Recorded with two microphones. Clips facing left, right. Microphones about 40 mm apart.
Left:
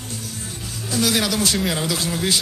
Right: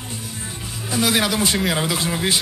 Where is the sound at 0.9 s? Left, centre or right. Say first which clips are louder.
Right 1 dB; centre.